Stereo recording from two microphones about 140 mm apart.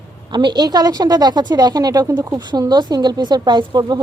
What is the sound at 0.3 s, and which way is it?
A woman's voice, 30° right (ahead or behind).